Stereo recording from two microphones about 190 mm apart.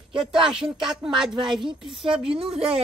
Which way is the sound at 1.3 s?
25° right (ahead or behind).